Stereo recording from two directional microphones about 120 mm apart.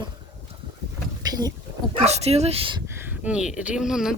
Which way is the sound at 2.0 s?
65° right (ahead or behind).